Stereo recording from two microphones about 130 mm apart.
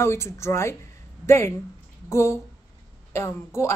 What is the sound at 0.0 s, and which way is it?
Speech, 20° left (ahead or behind).